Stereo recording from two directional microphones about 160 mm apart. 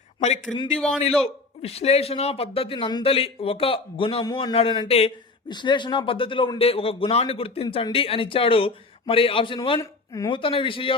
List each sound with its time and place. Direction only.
0.5 s speech: centre (ahead or behind)
1.2 s a man's voice: 40° left (ahead or behind)